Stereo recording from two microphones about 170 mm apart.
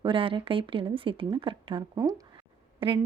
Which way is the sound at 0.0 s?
30° right (ahead or behind).